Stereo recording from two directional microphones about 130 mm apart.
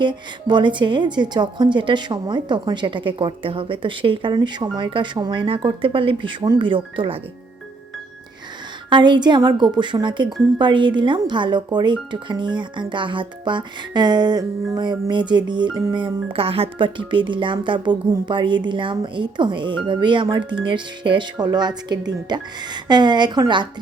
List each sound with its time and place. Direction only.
0.0 s speech: 35° right (ahead or behind)
8.9 s speech: 35° right (ahead or behind)